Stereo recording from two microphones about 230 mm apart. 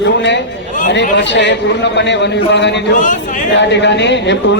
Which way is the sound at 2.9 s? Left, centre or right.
Left.